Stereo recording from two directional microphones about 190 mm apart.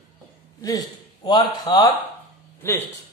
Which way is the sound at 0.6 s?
20° left (ahead or behind).